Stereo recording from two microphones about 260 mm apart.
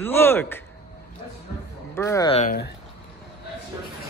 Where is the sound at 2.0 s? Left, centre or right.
Centre.